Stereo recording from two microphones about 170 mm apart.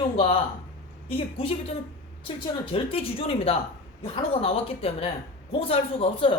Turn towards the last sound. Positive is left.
turn(degrees=30)  # may be behind; listen again after turning